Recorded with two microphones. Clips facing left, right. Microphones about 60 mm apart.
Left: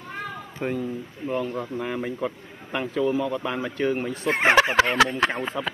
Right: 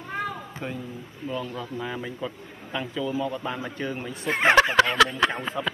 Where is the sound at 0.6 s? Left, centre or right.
Left.